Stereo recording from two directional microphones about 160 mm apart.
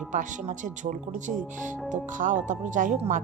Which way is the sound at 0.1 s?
50° right (ahead or behind).